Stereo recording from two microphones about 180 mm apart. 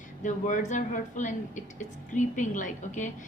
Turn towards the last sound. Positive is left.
turn(degrees=45)  # may be behind; listen again after turning